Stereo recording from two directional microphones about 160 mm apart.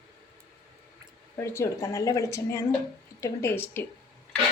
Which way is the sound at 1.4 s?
20° left (ahead or behind).